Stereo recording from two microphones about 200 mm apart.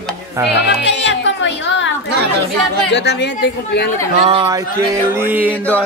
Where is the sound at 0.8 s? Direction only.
60° left (ahead or behind).